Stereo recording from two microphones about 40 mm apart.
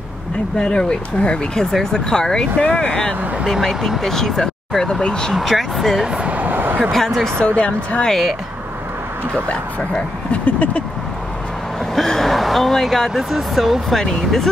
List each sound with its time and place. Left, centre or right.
0.6 s speech: left
1.6 s speech: centre
2.7 s speech: left
4.0 s speech: centre
5.3 s speech: centre
6.2 s a sound: right
7.4 s speech: left
8.1 s speech: centre
9.5 s speech: left
11.9 s speech: centre
13.1 s speech: centre
13.9 s speech: centre